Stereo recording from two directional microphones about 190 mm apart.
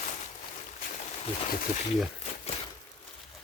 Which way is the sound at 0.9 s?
35° left (ahead or behind).